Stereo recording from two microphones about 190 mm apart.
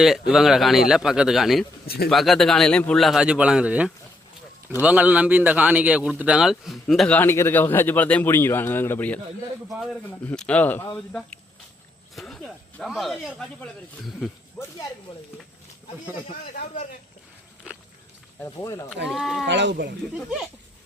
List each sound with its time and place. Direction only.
0.0 s a man's voice: centre (ahead or behind)
10.2 s speech: 5° left (ahead or behind)
15.1 s speech: 30° left (ahead or behind)
18.4 s speech: 15° left (ahead or behind)
19.1 s a man's voice: centre (ahead or behind)
19.5 s speech: 70° right (ahead or behind)
20.1 s a man's voice: centre (ahead or behind)